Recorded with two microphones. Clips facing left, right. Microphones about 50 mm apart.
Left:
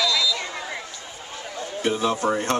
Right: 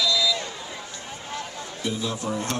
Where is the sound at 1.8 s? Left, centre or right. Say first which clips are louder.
Left 7 dB; left.